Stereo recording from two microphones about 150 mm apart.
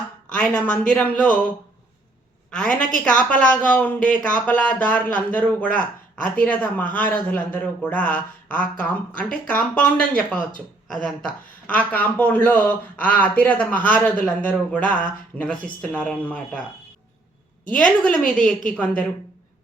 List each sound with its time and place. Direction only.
0.3 s speech: 10° left (ahead or behind)
2.5 s speech: 5° left (ahead or behind)
14.8 s speech: 60° left (ahead or behind)
15.4 s speech: 5° left (ahead or behind)
17.8 s a woman's voice: 5° left (ahead or behind)